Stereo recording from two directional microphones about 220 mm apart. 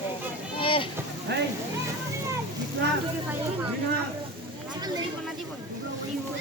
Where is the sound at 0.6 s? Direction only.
25° left (ahead or behind).